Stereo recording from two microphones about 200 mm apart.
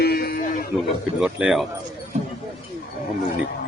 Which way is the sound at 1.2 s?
5° right (ahead or behind).